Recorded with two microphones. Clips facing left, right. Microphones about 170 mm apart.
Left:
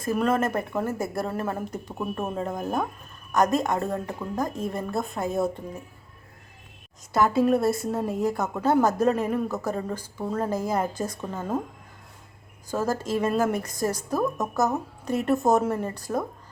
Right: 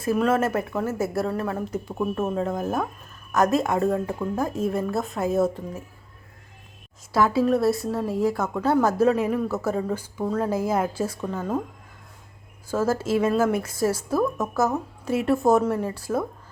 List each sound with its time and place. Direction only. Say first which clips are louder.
0.0 s speech: right 2 dB; 5° right (ahead or behind)
7.1 s speech: right 1 dB; centre (ahead or behind)
9.5 s a woman's voice: right 3 dB; 15° left (ahead or behind)
9.7 s speech: right 4 dB; 10° right (ahead or behind)
12.9 s speech: right 3 dB; 5° right (ahead or behind)